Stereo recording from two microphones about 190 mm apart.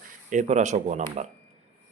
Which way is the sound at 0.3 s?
40° right (ahead or behind).